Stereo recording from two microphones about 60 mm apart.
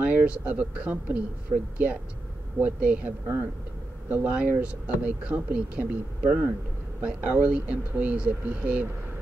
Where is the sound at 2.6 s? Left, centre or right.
Right.